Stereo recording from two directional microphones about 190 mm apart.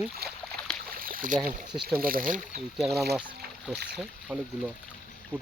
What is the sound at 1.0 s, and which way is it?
Boat, 50° right (ahead or behind).